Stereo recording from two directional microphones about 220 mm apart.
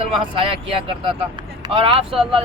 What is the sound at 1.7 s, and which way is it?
Speech, 25° right (ahead or behind).